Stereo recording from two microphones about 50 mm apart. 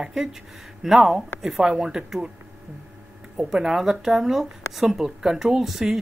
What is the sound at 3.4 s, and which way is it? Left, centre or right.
Speech, centre.